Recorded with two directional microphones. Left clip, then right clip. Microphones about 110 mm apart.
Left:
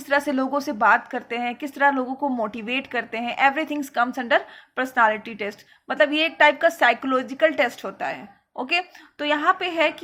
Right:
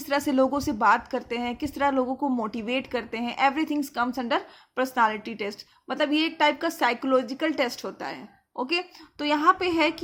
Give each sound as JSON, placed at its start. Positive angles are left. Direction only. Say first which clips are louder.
{"t": 0.1, "sound": "a woman's voice", "louder": "left 2 dB", "side_deg": -50}
{"t": 2.2, "sound": "a woman's voice", "louder": "left 3 dB", "side_deg": -25}
{"t": 2.5, "sound": "a woman's voice", "louder": "left 2 dB", "side_deg": -45}